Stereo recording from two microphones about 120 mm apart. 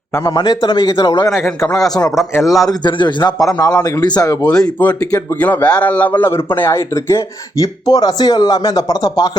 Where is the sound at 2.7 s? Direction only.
40° left (ahead or behind).